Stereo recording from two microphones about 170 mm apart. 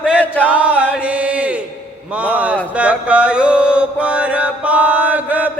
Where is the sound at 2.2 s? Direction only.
10° right (ahead or behind).